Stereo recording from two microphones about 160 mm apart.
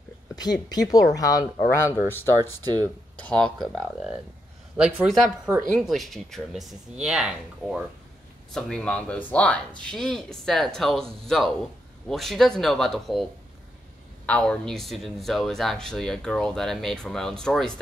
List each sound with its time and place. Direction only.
0.4 s a man's voice: 25° left (ahead or behind); by 17.7 s 5° left (ahead or behind)